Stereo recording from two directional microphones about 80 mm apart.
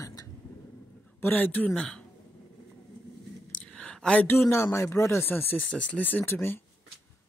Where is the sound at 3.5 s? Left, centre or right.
Centre.